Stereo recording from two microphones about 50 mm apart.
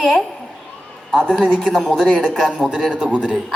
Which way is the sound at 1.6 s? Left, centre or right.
Centre.